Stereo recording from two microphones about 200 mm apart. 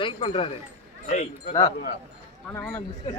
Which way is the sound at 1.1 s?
35° left (ahead or behind).